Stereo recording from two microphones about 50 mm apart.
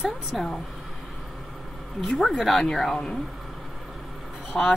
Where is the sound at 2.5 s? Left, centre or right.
Centre.